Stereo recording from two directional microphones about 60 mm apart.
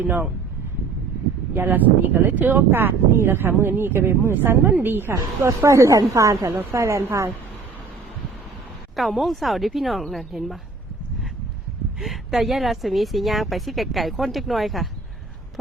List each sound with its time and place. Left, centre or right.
0.0 s speech: right
1.5 s speech: right
5.1 s a woman's voice: right
9.0 s a woman's voice: centre
11.9 s a woman's voice: centre